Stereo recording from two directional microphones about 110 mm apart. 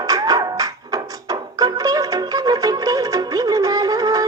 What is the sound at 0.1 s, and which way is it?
Music, 30° right (ahead or behind).